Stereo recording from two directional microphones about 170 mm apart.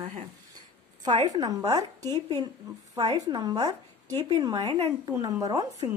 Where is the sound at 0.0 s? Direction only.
40° right (ahead or behind).